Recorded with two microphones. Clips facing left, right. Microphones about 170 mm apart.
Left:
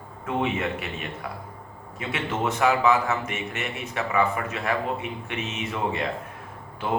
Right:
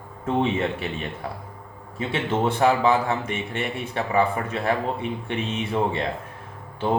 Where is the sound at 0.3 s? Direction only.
30° right (ahead or behind).